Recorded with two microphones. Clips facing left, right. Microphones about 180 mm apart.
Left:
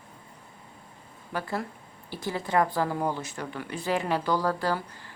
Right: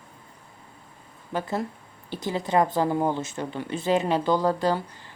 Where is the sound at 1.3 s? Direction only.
20° right (ahead or behind).